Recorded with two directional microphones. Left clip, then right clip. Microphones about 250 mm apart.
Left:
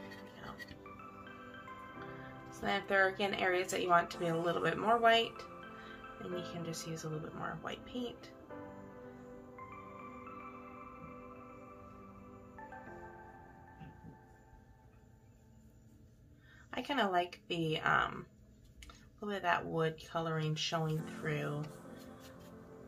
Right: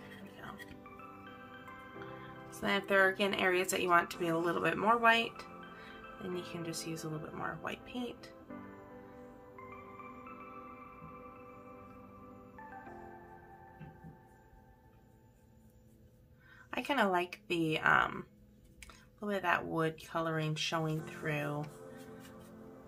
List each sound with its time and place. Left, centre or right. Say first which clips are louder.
2.6 s speech: right 2 dB; right
6.4 s speech: right 2 dB; centre
16.7 s speech: right 2 dB; right